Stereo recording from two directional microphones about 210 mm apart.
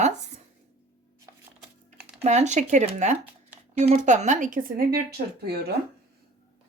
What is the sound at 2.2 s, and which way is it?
Speech, 35° right (ahead or behind).